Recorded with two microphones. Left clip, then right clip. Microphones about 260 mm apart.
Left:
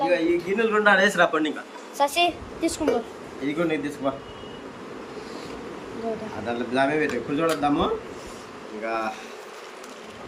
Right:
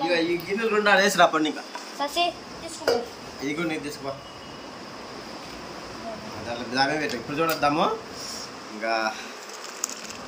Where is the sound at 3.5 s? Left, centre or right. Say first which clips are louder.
Left 3 dB; centre.